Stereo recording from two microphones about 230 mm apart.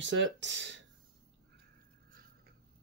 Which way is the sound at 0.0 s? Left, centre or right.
Right.